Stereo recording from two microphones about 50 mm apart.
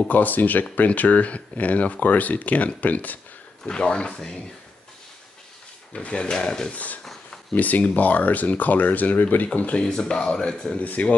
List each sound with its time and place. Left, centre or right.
0.1 s speech: left
3.6 s speech: centre
5.9 s speech: centre
6.7 s speech: left
9.8 s speech: centre
10.8 s speech: left